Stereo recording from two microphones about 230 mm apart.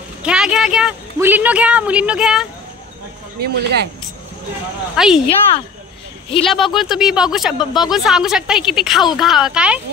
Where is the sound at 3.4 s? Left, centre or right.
Right.